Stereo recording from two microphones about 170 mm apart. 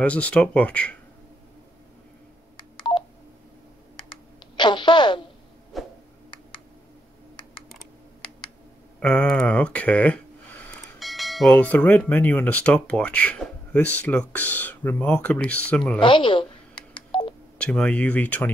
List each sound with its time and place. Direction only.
0.0 s speech: 5° left (ahead or behind)
4.1 s computer keyboard: 30° left (ahead or behind)
5.7 s a sound: centre (ahead or behind)
7.7 s computer keyboard: 5° left (ahead or behind)
9.0 s speech: 5° left (ahead or behind)
16.0 s speech: 30° left (ahead or behind)
16.9 s telephone dialing: 30° left (ahead or behind)
17.6 s speech: 5° left (ahead or behind)